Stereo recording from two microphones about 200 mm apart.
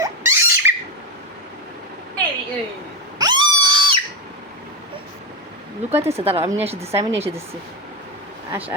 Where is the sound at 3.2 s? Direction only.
20° right (ahead or behind).